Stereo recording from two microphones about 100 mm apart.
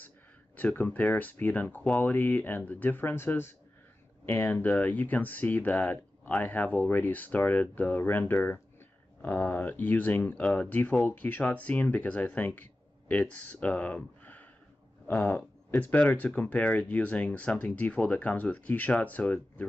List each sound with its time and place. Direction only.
0.6 s speech: 15° left (ahead or behind)